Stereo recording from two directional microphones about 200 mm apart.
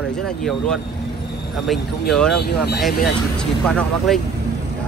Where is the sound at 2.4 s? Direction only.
55° left (ahead or behind).